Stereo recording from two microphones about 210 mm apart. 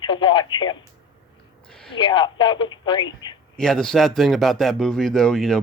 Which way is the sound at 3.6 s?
5° left (ahead or behind).